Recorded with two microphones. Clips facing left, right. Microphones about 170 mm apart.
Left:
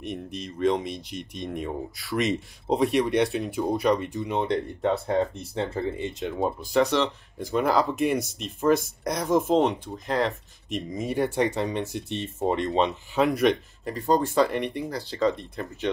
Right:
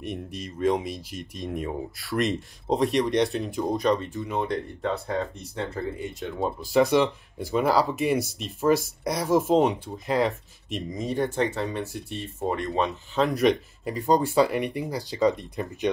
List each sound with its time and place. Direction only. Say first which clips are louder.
0.1 s speech: left 2 dB; 5° right (ahead or behind); by 6.4 s 20° left (ahead or behind)
6.4 s speech: right 1 dB; 5° right (ahead or behind); by 13.2 s 20° left (ahead or behind)
13.2 s speech: even; centre (ahead or behind)
13.8 s speech: right 1 dB; 10° right (ahead or behind)